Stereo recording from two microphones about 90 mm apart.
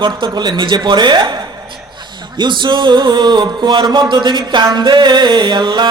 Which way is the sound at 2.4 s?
55° right (ahead or behind).